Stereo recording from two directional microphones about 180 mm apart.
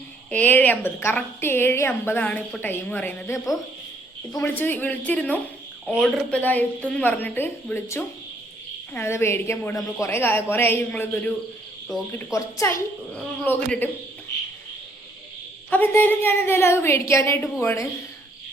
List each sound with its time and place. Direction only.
0.3 s a woman's voice: 10° left (ahead or behind)
12.2 s a woman's voice: 15° left (ahead or behind)
15.7 s a woman's voice: 10° left (ahead or behind)